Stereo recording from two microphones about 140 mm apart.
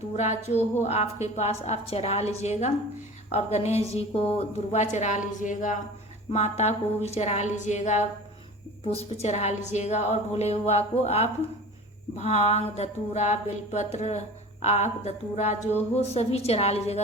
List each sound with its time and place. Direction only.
0.2 s a woman's voice: 55° left (ahead or behind)
6.3 s a woman's voice: 50° left (ahead or behind)